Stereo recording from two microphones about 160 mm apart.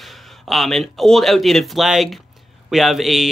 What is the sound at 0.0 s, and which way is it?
Speech, centre (ahead or behind).